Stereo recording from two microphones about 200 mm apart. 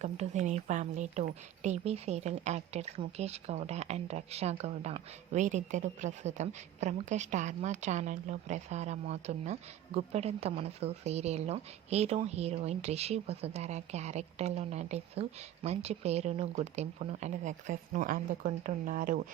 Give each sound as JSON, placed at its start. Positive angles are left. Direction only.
{"t": 0.0, "sound": "speech", "side_deg": -35}